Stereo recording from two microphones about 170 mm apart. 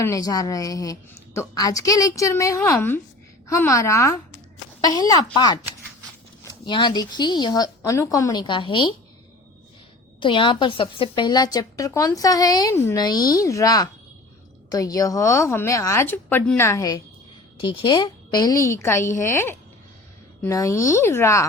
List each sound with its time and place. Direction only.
0.0 s a woman's voice: 20° left (ahead or behind)
10.2 s a woman's voice: 30° left (ahead or behind)